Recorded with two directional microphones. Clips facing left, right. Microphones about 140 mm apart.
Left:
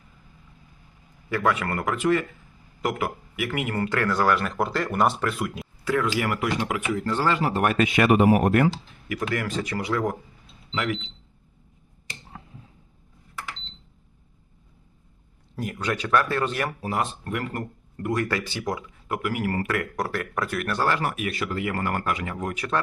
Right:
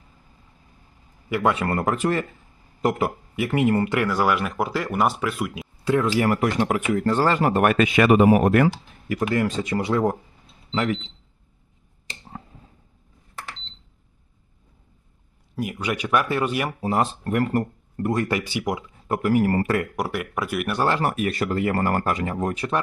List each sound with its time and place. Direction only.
1.3 s speech: 25° right (ahead or behind)
3.8 s speech: 15° right (ahead or behind)
5.8 s speech: 25° right (ahead or behind); by 7.9 s 65° right (ahead or behind)
9.3 s speech: 25° right (ahead or behind)
15.5 s speech: 10° right (ahead or behind)
16.8 s speech: 30° right (ahead or behind); by 18.8 s 15° right (ahead or behind)
19.0 s speech: 35° right (ahead or behind)
20.0 s speech: 10° right (ahead or behind)
21.1 s speech: 40° right (ahead or behind)